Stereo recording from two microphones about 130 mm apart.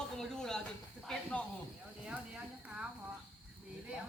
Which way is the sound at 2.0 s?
5° right (ahead or behind).